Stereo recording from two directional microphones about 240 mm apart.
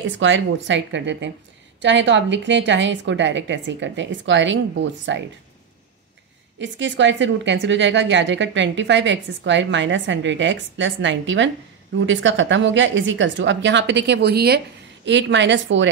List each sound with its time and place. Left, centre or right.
0.2 s a woman's voice: right
6.6 s a woman's voice: right